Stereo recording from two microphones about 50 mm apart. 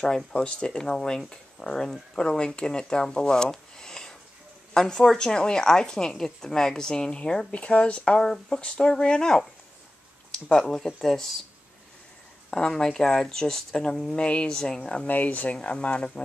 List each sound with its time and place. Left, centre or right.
0.4 s a woman's voice: centre
12.4 s a woman's voice: centre
14.1 s speech: left
15.0 s speech: left